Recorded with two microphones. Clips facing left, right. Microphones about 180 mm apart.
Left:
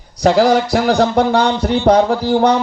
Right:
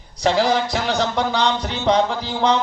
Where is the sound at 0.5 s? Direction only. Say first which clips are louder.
Left 7 dB; 60° left (ahead or behind).